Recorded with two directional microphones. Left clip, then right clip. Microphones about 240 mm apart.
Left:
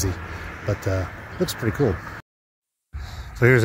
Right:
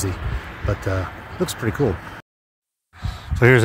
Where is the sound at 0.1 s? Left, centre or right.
Centre.